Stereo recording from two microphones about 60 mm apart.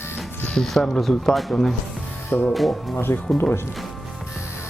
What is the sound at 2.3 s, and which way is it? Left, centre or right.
Speech, left.